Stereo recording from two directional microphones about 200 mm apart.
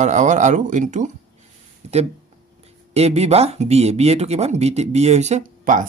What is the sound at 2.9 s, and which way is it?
Speech, 30° right (ahead or behind).